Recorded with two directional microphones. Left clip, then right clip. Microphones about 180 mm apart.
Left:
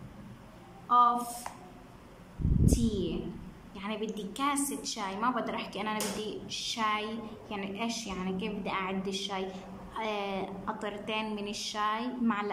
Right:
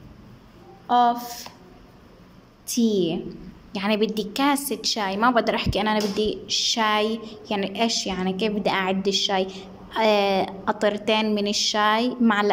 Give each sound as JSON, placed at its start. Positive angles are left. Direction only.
{"t": 0.8, "sound": "speech", "side_deg": -40}
{"t": 2.8, "sound": "a woman's voice", "side_deg": -45}